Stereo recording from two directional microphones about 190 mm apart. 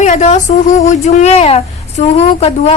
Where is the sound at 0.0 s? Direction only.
40° left (ahead or behind).